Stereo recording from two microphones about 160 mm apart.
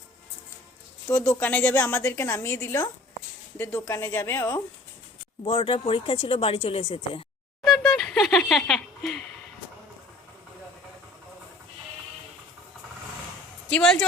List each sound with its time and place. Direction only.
1.0 s a woman's voice: 20° left (ahead or behind)
5.5 s speech: 35° left (ahead or behind)
7.6 s a sound: 5° left (ahead or behind)
13.7 s speech: 5° left (ahead or behind)